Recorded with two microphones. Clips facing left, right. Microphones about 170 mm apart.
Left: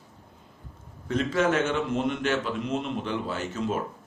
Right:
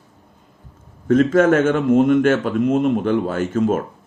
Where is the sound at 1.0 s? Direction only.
50° right (ahead or behind).